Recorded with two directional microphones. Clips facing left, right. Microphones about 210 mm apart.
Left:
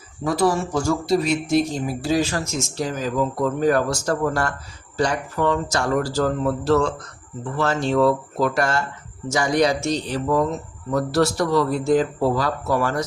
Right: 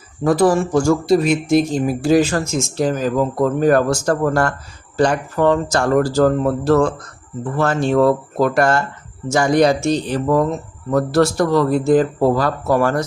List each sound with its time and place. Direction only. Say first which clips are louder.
0.3 s speech: right 6 dB; 50° right (ahead or behind)